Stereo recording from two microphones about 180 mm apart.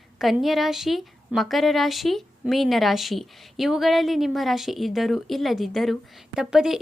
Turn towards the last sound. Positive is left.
turn(degrees=-5)  # may be behind; listen again after turning